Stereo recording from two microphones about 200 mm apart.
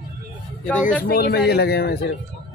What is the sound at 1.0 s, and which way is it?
A man's voice, 50° left (ahead or behind).